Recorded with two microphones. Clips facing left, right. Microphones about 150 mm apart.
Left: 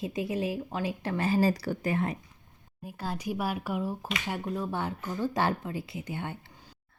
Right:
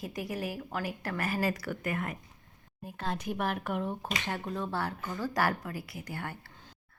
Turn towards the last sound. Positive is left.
turn(degrees=20)  # may be behind; listen again after turning